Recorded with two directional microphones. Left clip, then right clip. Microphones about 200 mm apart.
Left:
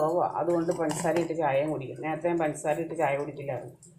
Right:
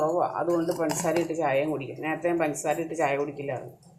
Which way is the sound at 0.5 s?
15° right (ahead or behind).